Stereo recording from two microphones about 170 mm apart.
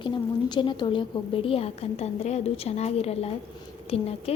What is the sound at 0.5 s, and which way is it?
A woman's voice, 25° left (ahead or behind).